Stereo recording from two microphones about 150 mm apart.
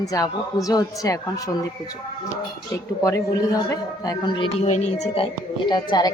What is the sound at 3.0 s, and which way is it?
A woman's voice, 20° left (ahead or behind).